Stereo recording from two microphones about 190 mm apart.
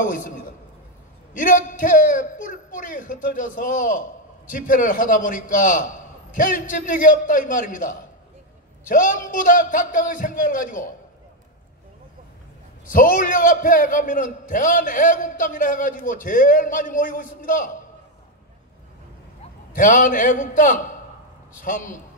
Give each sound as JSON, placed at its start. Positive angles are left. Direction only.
{"t": 0.0, "sound": "a man's voice", "side_deg": 45}
{"t": 12.8, "sound": "a man's voice", "side_deg": 45}
{"t": 19.7, "sound": "a man's voice", "side_deg": 45}